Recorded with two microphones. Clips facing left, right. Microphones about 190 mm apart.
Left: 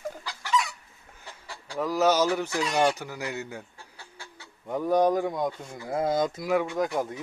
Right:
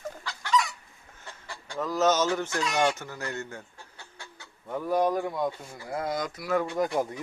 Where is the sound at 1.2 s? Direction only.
Centre (ahead or behind).